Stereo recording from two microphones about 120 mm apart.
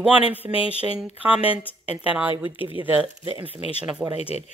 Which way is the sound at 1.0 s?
10° right (ahead or behind).